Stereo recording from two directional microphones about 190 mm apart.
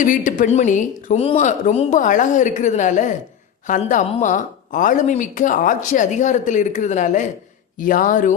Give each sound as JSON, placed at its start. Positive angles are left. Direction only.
{"t": 0.0, "sound": "speech", "side_deg": 45}